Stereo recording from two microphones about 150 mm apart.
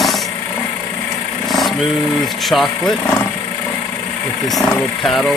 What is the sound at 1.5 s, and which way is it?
Speech, centre (ahead or behind).